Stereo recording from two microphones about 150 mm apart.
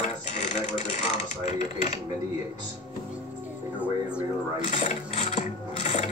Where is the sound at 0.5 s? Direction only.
50° left (ahead or behind).